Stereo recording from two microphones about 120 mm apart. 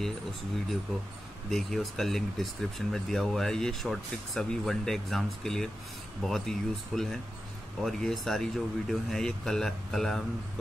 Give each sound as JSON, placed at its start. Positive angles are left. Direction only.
{"t": 1.5, "sound": "speech", "side_deg": 5}